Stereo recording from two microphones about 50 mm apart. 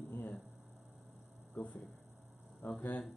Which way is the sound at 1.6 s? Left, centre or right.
Left.